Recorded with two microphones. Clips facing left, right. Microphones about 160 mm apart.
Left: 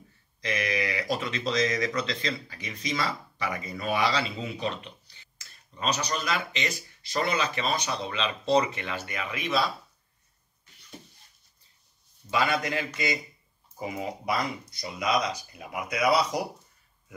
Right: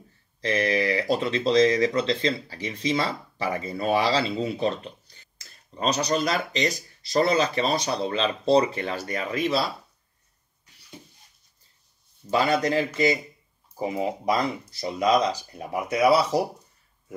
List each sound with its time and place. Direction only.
0.4 s speech: 35° right (ahead or behind)
12.3 s speech: 40° right (ahead or behind)